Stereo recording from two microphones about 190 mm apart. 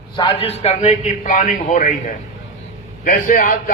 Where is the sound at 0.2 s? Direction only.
30° left (ahead or behind).